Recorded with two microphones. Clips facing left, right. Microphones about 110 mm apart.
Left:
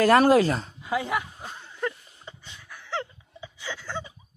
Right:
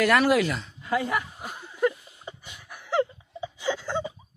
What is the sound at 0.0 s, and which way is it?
Speech, 35° left (ahead or behind).